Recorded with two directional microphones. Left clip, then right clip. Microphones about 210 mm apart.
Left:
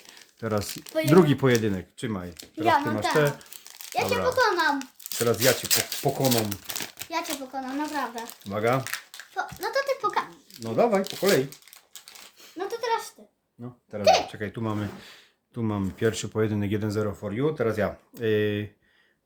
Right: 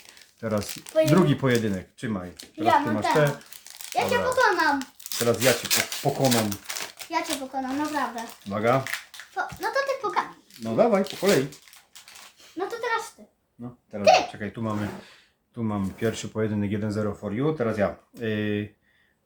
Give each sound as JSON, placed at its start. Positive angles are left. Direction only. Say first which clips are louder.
{"t": 0.3, "sound": "a child's voice", "louder": "even", "side_deg": 45}
{"t": 12.4, "sound": "a sound", "louder": "right 1 dB", "side_deg": 40}
{"t": 13.6, "sound": "speech", "louder": "even", "side_deg": 45}